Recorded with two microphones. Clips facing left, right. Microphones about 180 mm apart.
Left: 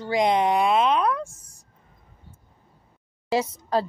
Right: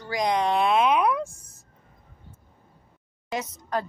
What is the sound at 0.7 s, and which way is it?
Speech, 10° right (ahead or behind).